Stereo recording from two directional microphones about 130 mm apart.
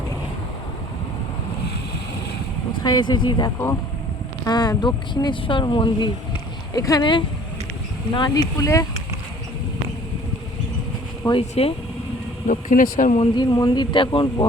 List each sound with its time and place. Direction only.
2.8 s speech: 35° left (ahead or behind)
8.5 s speech: 25° left (ahead or behind)
11.2 s speech: 30° left (ahead or behind)
12.5 s speech: 90° left
13.1 s speech: 35° left (ahead or behind)